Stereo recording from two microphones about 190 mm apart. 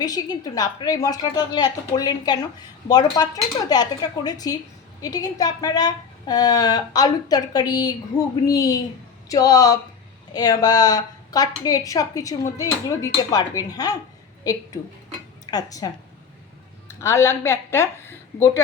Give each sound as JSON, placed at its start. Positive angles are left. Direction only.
{"t": 0.0, "sound": "a woman's voice", "side_deg": 20}
{"t": 16.9, "sound": "a woman's voice", "side_deg": 15}